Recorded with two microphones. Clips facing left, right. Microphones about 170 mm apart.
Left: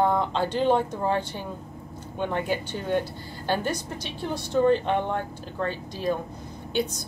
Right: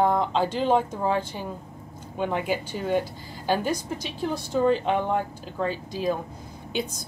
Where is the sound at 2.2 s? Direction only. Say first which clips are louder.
Right 1 dB; 5° right (ahead or behind).